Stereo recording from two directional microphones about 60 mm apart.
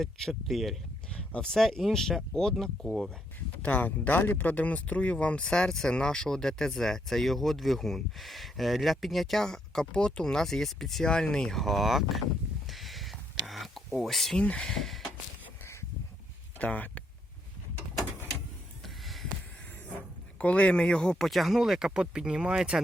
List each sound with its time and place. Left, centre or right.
0.0 s speech: centre
3.6 s speech: left; by 12.2 s centre
12.6 s a sound: centre
14.3 s speech: centre
14.6 s speech: centre
16.6 s speech: left
18.8 s a sound: centre
20.4 s speech: left
21.2 s speech: centre